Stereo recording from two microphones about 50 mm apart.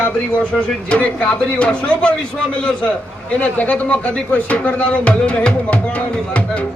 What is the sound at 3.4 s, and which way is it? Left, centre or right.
Speech, left.